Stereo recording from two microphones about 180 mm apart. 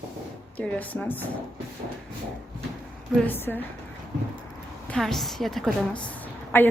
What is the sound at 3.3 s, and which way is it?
Speech, 10° left (ahead or behind).